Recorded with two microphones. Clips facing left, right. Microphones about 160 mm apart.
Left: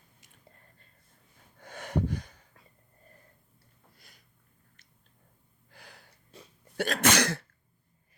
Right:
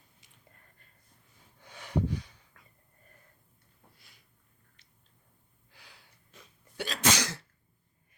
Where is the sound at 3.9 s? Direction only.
45° left (ahead or behind).